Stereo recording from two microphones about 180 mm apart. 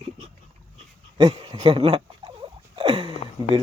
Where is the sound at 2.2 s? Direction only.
25° right (ahead or behind).